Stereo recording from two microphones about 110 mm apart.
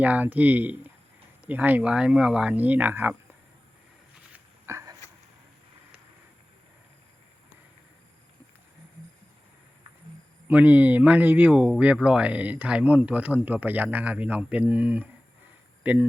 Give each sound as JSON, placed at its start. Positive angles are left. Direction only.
{"t": 0.0, "sound": "speech", "side_deg": -15}
{"t": 4.6, "sound": "a sound", "side_deg": -25}
{"t": 10.5, "sound": "speech", "side_deg": -15}